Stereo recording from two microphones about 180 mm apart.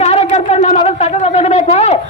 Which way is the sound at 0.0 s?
35° left (ahead or behind).